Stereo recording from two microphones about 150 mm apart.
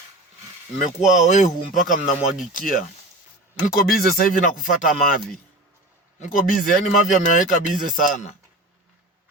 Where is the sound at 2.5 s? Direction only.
65° left (ahead or behind).